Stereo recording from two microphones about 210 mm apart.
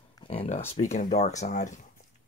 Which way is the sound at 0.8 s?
35° left (ahead or behind).